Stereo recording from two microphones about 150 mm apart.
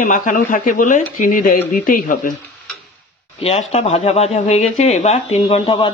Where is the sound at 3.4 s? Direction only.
45° left (ahead or behind).